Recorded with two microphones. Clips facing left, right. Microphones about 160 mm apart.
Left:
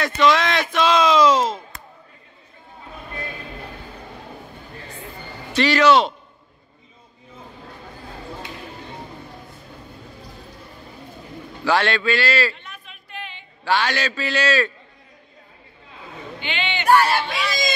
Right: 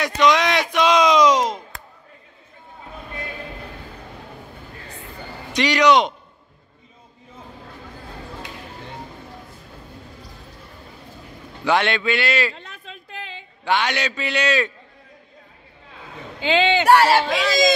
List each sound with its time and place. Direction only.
0.2 s speech: 15° right (ahead or behind)
5.5 s a man's voice: 15° right (ahead or behind)
11.6 s a man's voice: 20° right (ahead or behind)
13.7 s a man's voice: 20° right (ahead or behind)
16.3 s speech: 90° right